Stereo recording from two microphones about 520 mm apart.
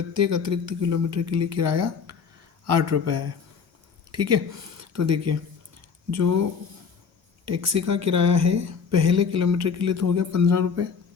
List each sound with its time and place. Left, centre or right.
0.1 s speech: right
7.4 s speech: right